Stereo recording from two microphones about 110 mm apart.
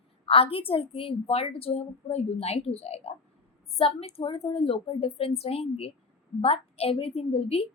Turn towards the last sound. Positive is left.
turn(degrees=60)  # may be behind; listen again after turning